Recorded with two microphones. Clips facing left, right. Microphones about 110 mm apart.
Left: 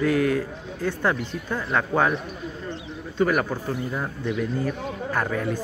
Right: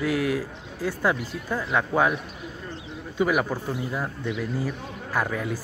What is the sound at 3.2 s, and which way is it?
A man's voice, 10° right (ahead or behind).